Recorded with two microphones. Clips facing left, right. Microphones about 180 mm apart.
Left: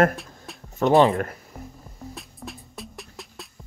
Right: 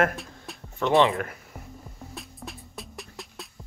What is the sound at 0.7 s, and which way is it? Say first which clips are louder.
Speech: left 4 dB; 40° left (ahead or behind).